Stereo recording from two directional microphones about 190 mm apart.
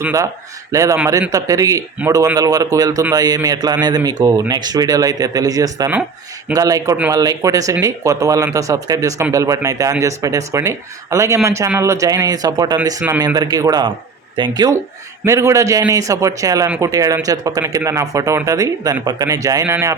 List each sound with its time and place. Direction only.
0.0 s a man's voice: 15° right (ahead or behind)